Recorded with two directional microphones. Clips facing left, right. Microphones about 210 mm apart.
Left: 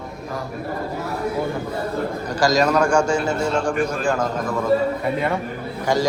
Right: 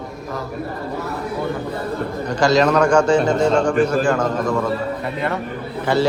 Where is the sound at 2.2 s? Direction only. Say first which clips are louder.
Right 3 dB; 10° left (ahead or behind).